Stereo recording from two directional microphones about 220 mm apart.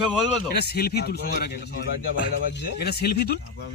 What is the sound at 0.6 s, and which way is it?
Speech, 45° left (ahead or behind).